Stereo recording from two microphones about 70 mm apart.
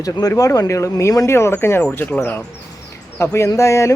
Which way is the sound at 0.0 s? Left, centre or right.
Left.